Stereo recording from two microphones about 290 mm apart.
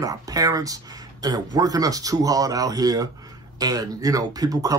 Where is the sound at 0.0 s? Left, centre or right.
Centre.